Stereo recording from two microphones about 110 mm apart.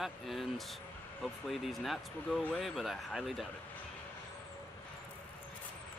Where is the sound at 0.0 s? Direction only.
Centre (ahead or behind).